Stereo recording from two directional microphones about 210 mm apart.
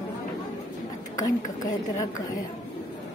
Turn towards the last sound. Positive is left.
turn(degrees=15)  # may be behind; listen again after turning